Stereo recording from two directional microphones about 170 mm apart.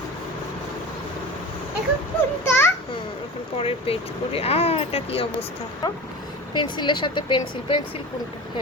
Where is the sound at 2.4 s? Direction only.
15° left (ahead or behind).